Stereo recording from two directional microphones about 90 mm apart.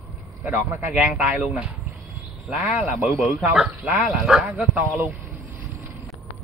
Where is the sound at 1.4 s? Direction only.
15° right (ahead or behind).